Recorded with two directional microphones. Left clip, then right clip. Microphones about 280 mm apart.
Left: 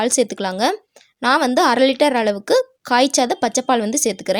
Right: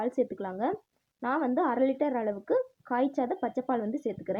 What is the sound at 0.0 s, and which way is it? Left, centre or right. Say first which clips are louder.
Speech: left 12 dB; left.